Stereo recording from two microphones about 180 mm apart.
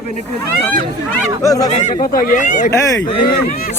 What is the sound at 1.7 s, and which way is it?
Speech, 40° left (ahead or behind).